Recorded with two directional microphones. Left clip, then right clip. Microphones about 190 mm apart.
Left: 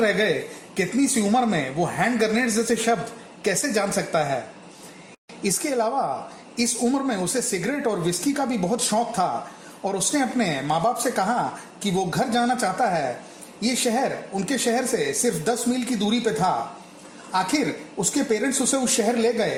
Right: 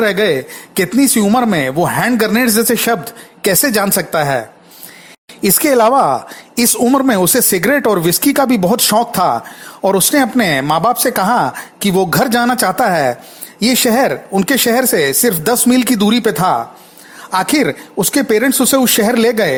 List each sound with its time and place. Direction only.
0.0 s speech: 35° right (ahead or behind)
5.4 s speech: 45° right (ahead or behind)